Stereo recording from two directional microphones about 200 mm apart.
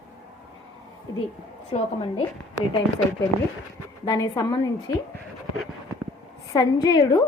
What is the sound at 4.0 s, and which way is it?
Speech, 20° left (ahead or behind).